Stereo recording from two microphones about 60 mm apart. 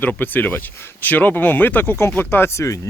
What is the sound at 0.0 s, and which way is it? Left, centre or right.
Speech, left.